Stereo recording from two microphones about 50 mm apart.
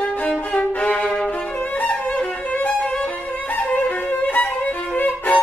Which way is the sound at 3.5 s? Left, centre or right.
Left.